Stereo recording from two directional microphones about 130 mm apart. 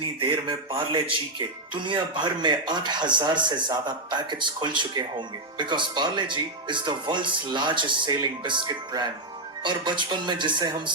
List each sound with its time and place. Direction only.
0.2 s speech: 40° right (ahead or behind)